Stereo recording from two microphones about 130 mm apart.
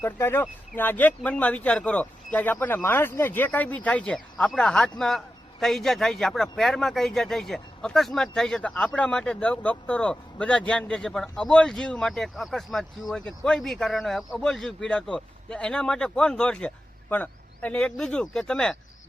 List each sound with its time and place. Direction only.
0.0 s speech: 20° left (ahead or behind)